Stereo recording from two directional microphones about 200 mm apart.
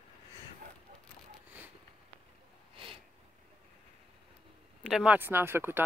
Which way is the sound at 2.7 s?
25° right (ahead or behind).